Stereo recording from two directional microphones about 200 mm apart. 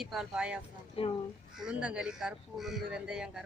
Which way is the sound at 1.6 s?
5° right (ahead or behind).